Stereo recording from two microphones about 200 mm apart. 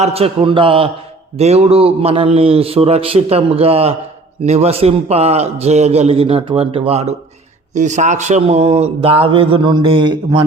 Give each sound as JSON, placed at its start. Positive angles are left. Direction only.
{"t": 0.0, "sound": "a man's voice", "side_deg": -30}